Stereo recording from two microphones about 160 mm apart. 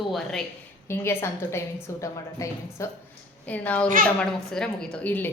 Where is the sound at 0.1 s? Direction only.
5° left (ahead or behind).